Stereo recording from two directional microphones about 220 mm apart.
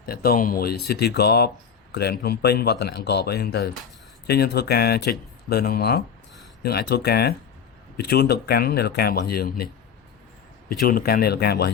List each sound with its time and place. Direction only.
0.0 s speech: 45° left (ahead or behind)
10.7 s speech: 40° left (ahead or behind)